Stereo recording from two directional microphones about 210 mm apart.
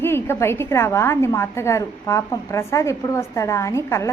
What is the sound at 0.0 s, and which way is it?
A woman's voice, 10° left (ahead or behind).